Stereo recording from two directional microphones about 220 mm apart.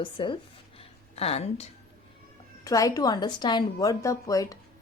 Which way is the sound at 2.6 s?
15° left (ahead or behind).